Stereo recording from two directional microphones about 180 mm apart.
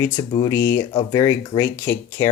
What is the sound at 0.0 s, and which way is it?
Speech, 20° left (ahead or behind).